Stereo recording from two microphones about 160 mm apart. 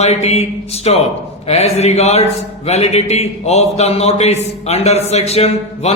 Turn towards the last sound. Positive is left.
turn(degrees=40)  # may be behind; listen again after turning